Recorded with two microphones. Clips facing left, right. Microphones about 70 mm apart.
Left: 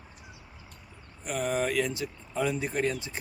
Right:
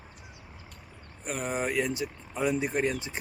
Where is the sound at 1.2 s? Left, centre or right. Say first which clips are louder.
Left 2 dB; right.